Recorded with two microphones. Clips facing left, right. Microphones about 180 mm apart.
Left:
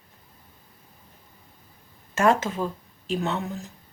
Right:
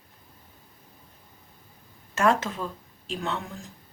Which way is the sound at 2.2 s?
Centre (ahead or behind).